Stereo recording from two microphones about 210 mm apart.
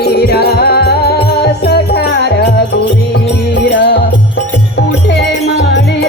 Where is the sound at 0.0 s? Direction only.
50° left (ahead or behind).